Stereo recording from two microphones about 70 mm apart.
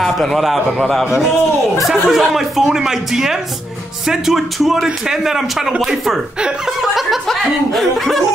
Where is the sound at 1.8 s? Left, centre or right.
Centre.